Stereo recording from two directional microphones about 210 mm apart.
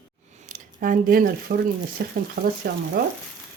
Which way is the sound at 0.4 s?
40° right (ahead or behind).